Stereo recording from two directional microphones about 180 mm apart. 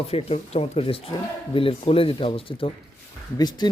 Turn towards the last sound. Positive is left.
turn(degrees=25)  # may be behind; listen again after turning